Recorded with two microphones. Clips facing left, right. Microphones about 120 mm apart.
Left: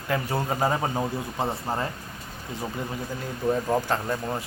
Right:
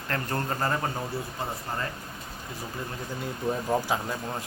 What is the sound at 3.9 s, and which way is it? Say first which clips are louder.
Speech: left 3 dB; centre (ahead or behind).